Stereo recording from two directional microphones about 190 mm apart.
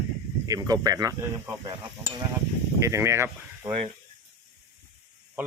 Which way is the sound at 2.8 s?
15° right (ahead or behind).